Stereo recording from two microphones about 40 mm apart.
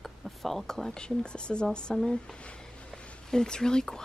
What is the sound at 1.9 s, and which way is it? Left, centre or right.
Speech, centre.